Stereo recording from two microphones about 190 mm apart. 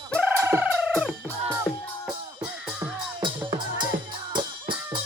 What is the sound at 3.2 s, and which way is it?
Music, 25° right (ahead or behind).